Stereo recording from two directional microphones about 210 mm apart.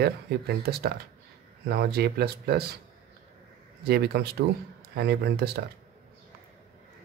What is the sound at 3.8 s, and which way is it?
Speech, 50° right (ahead or behind).